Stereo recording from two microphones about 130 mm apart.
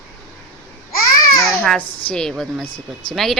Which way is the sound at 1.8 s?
45° left (ahead or behind).